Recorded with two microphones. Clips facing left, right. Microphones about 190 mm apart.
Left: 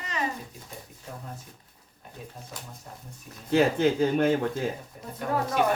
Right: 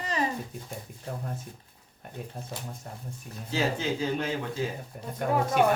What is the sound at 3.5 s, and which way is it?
Speech, 55° left (ahead or behind).